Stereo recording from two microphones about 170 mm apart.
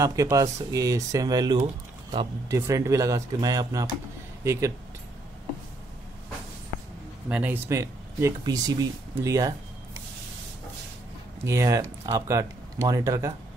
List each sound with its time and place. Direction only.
0.0 s speech: 20° right (ahead or behind)
7.2 s speech: 10° right (ahead or behind)
11.4 s speech: 20° right (ahead or behind)